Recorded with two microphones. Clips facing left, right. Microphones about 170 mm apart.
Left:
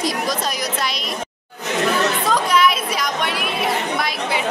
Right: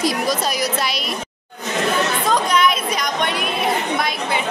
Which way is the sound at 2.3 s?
5° left (ahead or behind).